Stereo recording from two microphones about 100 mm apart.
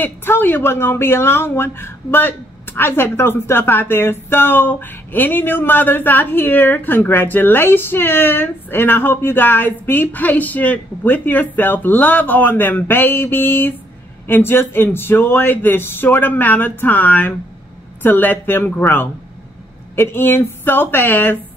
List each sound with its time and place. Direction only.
0.0 s speech: 20° left (ahead or behind)